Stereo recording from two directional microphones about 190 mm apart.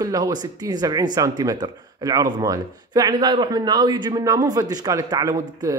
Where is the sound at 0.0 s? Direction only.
20° right (ahead or behind).